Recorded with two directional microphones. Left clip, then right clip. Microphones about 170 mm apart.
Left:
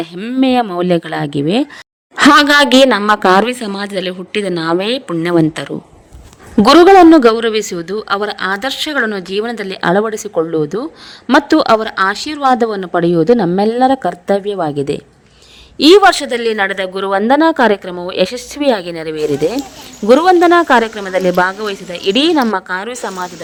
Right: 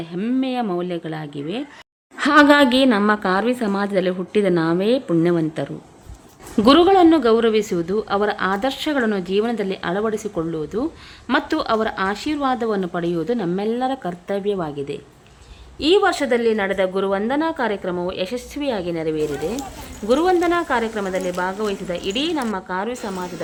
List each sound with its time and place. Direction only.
0.2 s speech: 30° left (ahead or behind)
0.4 s speech: 45° left (ahead or behind)
4.6 s speech: 50° left (ahead or behind)